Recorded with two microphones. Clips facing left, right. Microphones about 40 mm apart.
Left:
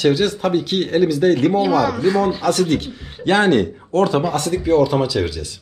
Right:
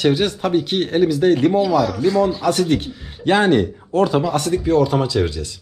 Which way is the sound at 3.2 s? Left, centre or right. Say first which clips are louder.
Even; left.